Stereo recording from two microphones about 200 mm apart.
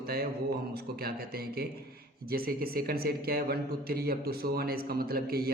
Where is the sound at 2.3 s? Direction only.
50° right (ahead or behind).